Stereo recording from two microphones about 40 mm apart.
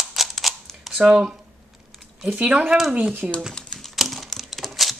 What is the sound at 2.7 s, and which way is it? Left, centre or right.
Speech, centre.